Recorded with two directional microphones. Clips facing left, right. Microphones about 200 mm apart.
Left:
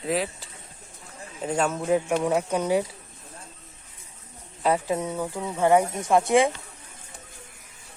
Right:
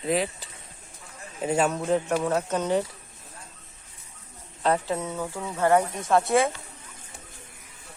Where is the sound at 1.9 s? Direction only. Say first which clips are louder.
Left 1 dB; 10° left (ahead or behind).